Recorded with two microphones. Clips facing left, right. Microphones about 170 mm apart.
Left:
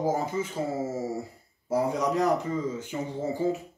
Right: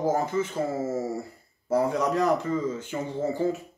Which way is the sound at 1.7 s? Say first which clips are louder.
Right 2 dB; 15° left (ahead or behind).